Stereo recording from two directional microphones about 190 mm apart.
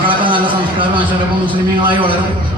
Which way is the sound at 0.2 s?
25° right (ahead or behind).